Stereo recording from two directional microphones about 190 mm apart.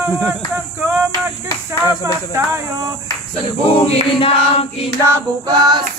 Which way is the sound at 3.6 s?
30° left (ahead or behind).